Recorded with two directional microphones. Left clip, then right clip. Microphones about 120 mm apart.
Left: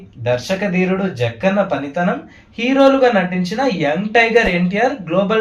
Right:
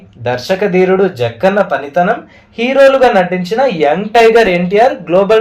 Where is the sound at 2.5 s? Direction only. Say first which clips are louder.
Right 5 dB; 40° right (ahead or behind).